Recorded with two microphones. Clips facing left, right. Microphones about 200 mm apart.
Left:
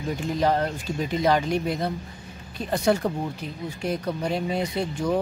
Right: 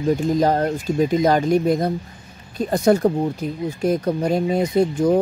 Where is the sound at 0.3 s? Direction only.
40° right (ahead or behind).